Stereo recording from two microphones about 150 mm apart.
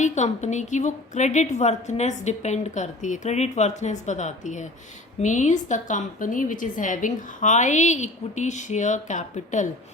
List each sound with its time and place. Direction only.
0.0 s a woman's voice: 50° left (ahead or behind)